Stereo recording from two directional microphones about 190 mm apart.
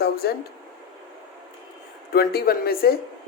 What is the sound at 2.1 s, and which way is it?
Speech, 55° left (ahead or behind).